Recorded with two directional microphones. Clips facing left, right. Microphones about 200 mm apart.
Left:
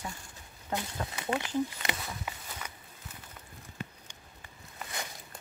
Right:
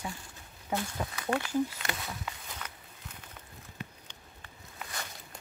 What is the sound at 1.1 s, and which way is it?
Speech, 20° left (ahead or behind).